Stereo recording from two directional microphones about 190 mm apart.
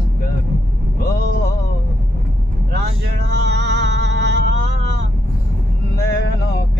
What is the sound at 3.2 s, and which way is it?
Music, 65° right (ahead or behind).